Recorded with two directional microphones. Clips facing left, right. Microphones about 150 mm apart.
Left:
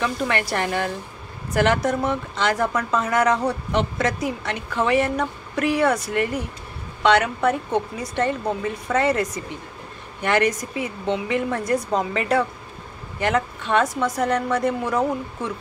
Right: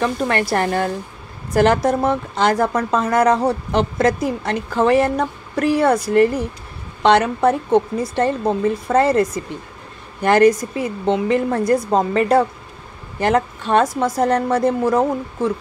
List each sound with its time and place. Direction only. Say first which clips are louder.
0.0 s speech: right 4 dB; 35° right (ahead or behind)